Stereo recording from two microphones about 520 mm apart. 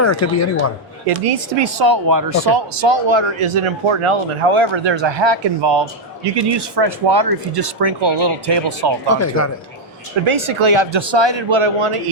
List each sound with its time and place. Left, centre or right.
0.0 s speech: left
1.1 s speech: right
1.6 s speech: right
2.7 s speech: right
9.0 s speech: left
10.2 s speech: right